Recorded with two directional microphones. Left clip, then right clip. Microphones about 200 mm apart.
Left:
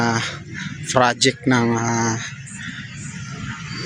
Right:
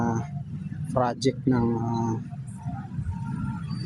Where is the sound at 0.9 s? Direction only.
5° left (ahead or behind).